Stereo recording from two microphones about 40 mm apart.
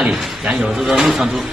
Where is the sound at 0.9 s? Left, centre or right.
Centre.